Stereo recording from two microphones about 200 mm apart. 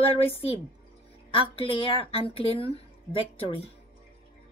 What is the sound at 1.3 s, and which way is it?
Speech, 25° left (ahead or behind).